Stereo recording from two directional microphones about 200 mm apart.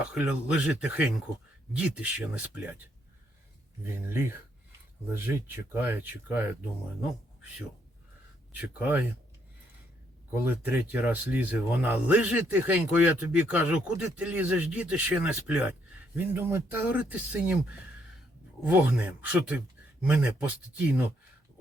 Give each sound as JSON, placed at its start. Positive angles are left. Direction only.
{"t": 0.0, "sound": "speech", "side_deg": -5}
{"t": 3.8, "sound": "speech", "side_deg": -10}
{"t": 8.5, "sound": "speech", "side_deg": -10}
{"t": 10.4, "sound": "speech", "side_deg": -10}
{"t": 18.6, "sound": "speech", "side_deg": -5}